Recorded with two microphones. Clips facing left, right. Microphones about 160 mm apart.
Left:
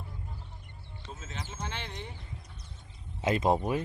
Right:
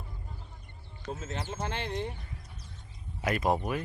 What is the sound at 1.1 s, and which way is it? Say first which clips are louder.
Speech: right 6 dB; 50° right (ahead or behind).